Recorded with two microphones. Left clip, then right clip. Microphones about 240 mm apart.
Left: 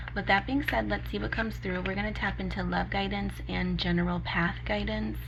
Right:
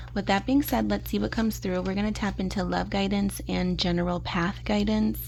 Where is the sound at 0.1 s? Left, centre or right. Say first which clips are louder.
Right 2 dB; right.